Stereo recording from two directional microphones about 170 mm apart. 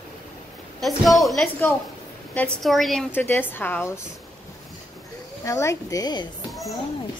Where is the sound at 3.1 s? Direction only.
15° left (ahead or behind).